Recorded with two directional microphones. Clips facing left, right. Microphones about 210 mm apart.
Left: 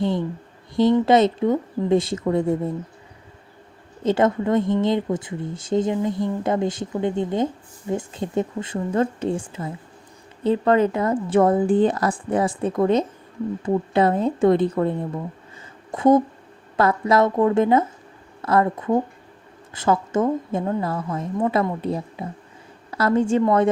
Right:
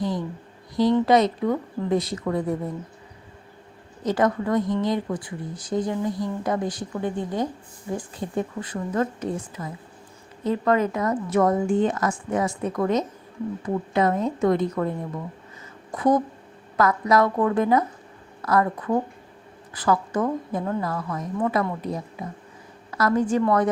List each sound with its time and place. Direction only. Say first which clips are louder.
0.0 s speech: left 4 dB; 25° left (ahead or behind)
4.0 s speech: left 3 dB; 25° left (ahead or behind)